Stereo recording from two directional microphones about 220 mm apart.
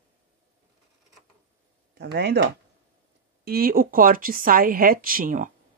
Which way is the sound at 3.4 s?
40° right (ahead or behind).